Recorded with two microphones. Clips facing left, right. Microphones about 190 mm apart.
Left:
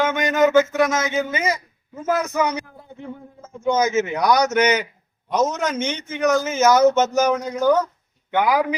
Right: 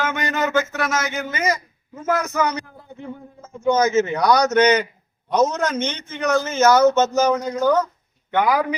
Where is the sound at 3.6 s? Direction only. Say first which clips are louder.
Right 2 dB; 15° left (ahead or behind).